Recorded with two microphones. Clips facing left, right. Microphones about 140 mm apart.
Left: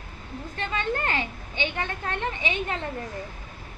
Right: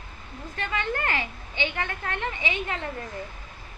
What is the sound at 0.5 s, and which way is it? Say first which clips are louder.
A woman's voice: left 1 dB; 25° left (ahead or behind).